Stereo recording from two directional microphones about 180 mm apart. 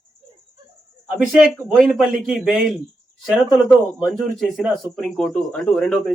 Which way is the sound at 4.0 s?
Centre (ahead or behind).